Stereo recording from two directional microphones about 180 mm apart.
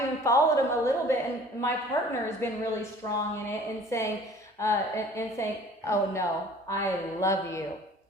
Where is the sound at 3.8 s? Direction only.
15° left (ahead or behind).